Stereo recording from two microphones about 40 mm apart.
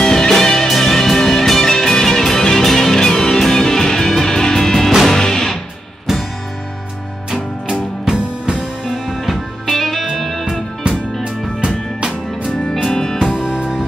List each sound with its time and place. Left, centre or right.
0.0 s music: centre
7.2 s music: right
8.8 s music: centre
12.4 s music: centre
13.3 s music: right